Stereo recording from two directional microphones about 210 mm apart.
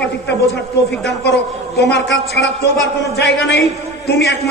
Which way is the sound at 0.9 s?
55° left (ahead or behind).